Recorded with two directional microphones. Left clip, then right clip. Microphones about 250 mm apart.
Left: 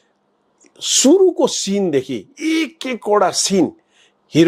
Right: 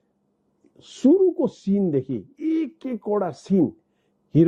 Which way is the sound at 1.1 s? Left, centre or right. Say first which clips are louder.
Left 5 dB; left.